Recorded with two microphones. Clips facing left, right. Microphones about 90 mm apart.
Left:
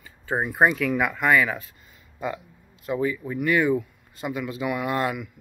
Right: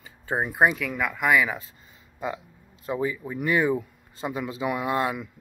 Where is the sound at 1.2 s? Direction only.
10° right (ahead or behind).